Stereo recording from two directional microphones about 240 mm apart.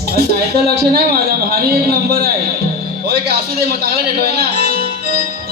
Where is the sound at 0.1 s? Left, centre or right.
Right.